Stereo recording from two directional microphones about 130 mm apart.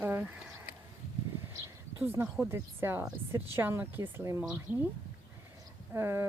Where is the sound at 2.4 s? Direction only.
20° right (ahead or behind).